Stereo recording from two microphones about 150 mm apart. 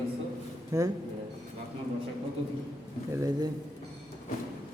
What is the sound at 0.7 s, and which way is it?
Speech, 20° right (ahead or behind).